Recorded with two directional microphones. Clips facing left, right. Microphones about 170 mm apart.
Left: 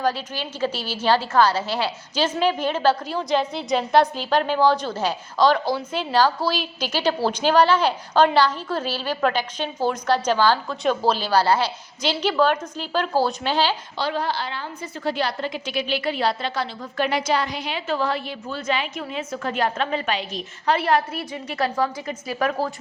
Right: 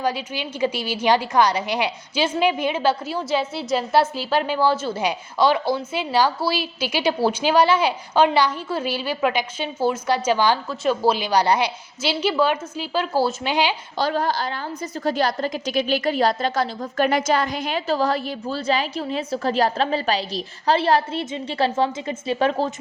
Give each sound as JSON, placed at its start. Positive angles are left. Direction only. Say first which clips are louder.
{"t": 0.0, "sound": "a woman's voice", "louder": "even", "side_deg": -10}
{"t": 13.9, "sound": "a woman's voice", "louder": "right 3 dB", "side_deg": -45}